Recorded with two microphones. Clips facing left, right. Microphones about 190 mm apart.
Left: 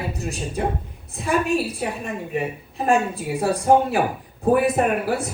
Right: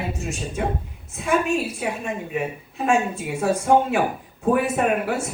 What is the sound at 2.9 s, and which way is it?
A woman's voice, 35° left (ahead or behind).